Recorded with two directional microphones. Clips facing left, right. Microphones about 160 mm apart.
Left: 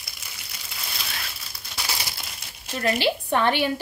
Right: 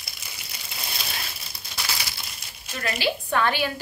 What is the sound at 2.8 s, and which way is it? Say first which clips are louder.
Speech: left 4 dB; 30° left (ahead or behind).